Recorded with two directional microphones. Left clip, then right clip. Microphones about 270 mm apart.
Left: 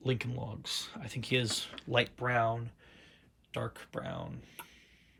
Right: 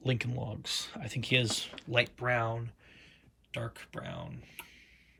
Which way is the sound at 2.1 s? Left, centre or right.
Centre.